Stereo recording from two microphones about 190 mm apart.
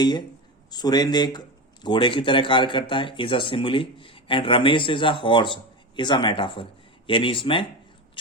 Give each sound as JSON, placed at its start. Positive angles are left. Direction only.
{"t": 0.0, "sound": "speech", "side_deg": 20}